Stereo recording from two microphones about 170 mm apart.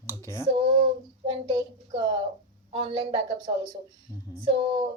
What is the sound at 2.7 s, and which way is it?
Speech, 30° right (ahead or behind).